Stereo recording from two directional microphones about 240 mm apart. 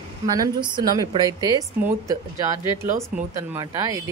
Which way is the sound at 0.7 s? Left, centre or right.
Centre.